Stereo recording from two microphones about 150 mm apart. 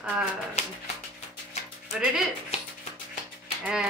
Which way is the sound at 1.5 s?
45° left (ahead or behind).